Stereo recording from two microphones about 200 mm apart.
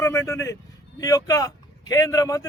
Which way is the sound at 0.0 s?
15° left (ahead or behind).